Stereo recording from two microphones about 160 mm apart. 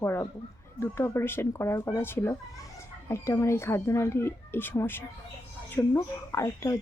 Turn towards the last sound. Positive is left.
turn(degrees=20)  # may be behind; listen again after turning